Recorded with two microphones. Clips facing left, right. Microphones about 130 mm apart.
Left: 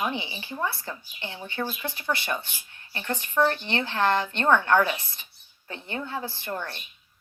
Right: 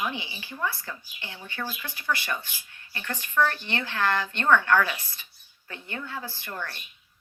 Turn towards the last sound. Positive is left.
turn(degrees=25)  # may be behind; listen again after turning